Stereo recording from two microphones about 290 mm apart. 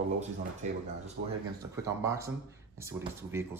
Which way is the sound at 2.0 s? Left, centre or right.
Centre.